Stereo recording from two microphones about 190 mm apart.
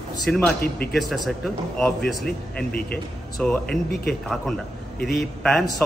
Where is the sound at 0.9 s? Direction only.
Centre (ahead or behind).